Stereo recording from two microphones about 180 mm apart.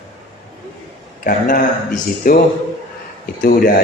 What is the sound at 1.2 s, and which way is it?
A man's voice, 50° left (ahead or behind).